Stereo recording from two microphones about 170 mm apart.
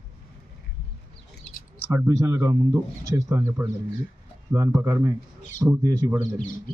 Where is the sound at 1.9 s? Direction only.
20° right (ahead or behind).